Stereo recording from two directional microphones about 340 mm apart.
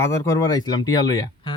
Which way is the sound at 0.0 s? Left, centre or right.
Centre.